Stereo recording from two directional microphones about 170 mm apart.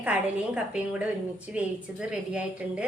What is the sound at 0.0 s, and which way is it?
A woman's voice, 10° right (ahead or behind).